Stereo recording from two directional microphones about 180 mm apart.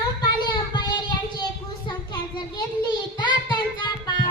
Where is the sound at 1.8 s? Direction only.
25° left (ahead or behind).